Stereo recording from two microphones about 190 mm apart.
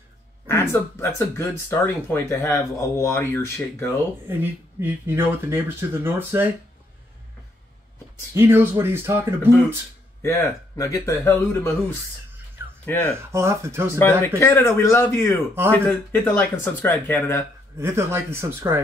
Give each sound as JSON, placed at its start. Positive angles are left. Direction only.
{"t": 0.5, "sound": "speech", "side_deg": 15}
{"t": 4.3, "sound": "speech", "side_deg": -10}
{"t": 8.4, "sound": "speech", "side_deg": -10}
{"t": 10.2, "sound": "speech", "side_deg": 15}
{"t": 12.8, "sound": "speech", "side_deg": 10}
{"t": 13.2, "sound": "speech", "side_deg": -15}
{"t": 13.9, "sound": "speech", "side_deg": 15}
{"t": 17.7, "sound": "speech", "side_deg": -15}